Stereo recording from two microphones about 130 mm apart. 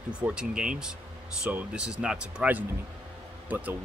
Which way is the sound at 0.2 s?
5° right (ahead or behind).